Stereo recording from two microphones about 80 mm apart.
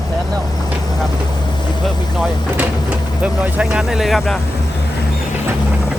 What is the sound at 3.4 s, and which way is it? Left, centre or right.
Speech, centre.